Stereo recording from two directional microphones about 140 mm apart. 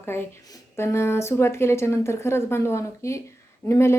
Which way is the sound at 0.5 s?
20° left (ahead or behind).